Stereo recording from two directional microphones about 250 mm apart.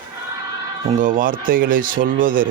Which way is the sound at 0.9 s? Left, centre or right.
Right.